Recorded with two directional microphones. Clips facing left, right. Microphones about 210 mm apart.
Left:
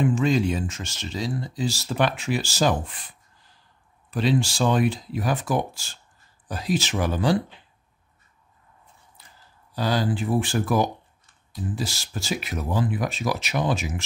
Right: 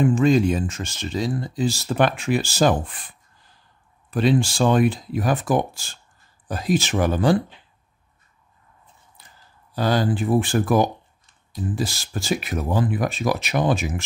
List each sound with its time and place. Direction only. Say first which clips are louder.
0.0 s speech: right 4 dB; 50° right (ahead or behind)
9.8 s speech: right 3 dB; 50° right (ahead or behind)